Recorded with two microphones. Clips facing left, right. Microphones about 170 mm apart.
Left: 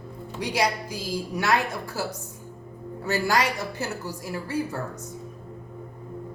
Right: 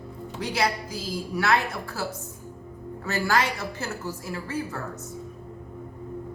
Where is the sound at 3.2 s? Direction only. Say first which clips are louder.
Right 1 dB; 15° left (ahead or behind).